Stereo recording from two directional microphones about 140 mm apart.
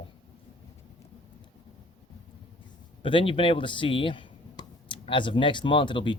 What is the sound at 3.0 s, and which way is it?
Speech, 35° left (ahead or behind).